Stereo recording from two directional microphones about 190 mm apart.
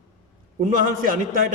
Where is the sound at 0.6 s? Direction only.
45° right (ahead or behind).